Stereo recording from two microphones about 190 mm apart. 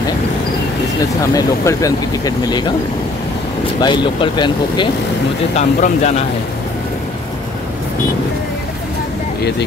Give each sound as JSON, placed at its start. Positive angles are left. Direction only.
{"t": 1.2, "sound": "speech", "side_deg": 15}
{"t": 3.8, "sound": "speech", "side_deg": 25}
{"t": 5.6, "sound": "speech", "side_deg": 35}